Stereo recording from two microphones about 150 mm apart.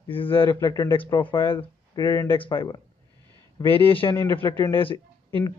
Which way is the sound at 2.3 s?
35° left (ahead or behind).